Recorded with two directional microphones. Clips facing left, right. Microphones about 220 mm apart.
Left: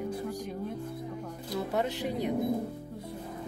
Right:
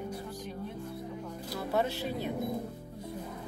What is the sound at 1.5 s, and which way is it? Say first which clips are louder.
Music: left 1 dB; 15° left (ahead or behind).